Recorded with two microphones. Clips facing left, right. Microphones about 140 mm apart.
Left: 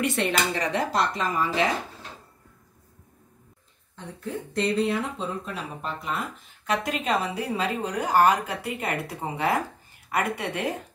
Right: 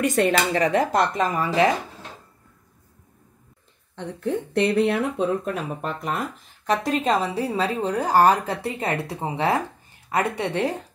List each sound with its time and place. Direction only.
0.0 s speech: 45° right (ahead or behind)
3.9 s speech: 65° right (ahead or behind); by 9.4 s 25° right (ahead or behind)
10.1 s a woman's voice: 35° right (ahead or behind)